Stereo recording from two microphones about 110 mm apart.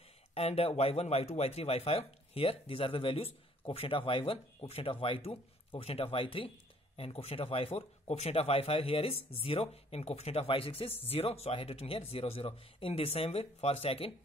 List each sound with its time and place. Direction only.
0.3 s speech: 70° left (ahead or behind)